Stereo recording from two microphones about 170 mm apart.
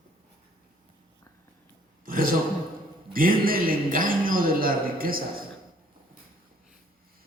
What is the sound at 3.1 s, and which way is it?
A man's voice, 55° right (ahead or behind).